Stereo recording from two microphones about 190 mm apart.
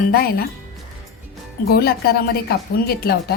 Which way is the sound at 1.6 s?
55° left (ahead or behind).